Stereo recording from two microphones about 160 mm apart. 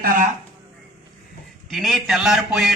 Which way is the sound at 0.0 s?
60° right (ahead or behind).